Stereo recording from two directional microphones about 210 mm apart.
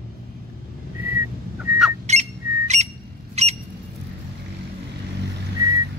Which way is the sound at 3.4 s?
30° right (ahead or behind).